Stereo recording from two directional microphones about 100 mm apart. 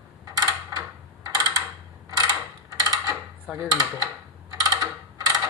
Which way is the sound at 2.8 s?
35° right (ahead or behind).